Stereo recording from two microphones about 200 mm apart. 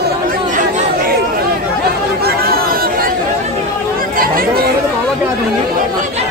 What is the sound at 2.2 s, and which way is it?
Chatter, 50° right (ahead or behind).